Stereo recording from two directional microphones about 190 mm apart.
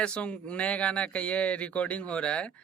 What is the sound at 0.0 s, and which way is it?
Speech, 5° left (ahead or behind).